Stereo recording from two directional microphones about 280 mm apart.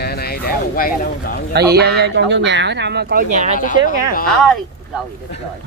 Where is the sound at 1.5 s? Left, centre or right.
Right.